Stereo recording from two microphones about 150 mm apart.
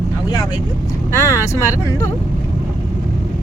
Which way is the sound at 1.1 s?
20° left (ahead or behind).